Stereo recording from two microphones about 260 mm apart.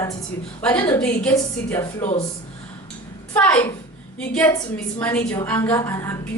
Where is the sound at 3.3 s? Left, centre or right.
Centre.